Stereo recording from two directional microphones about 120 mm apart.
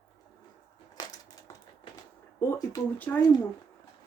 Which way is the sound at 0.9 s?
30° left (ahead or behind).